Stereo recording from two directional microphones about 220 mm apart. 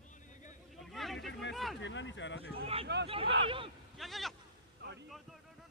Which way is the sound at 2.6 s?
25° right (ahead or behind).